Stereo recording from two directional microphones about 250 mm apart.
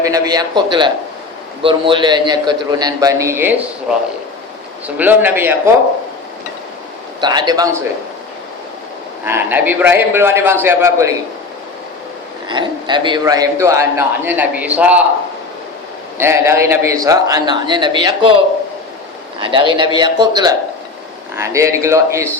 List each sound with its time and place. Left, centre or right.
0.0 s a man's voice: centre
4.9 s a man's voice: centre
7.2 s a man's voice: centre
9.2 s a man's voice: centre
12.5 s a man's voice: centre
16.1 s a man's voice: centre
19.4 s a man's voice: centre